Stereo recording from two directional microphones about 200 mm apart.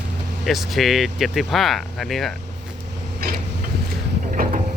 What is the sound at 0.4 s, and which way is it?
Speech, centre (ahead or behind).